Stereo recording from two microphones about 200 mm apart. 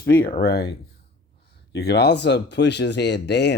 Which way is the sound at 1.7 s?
55° left (ahead or behind).